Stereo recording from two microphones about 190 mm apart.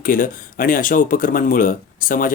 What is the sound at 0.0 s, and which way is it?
Speech, 45° left (ahead or behind).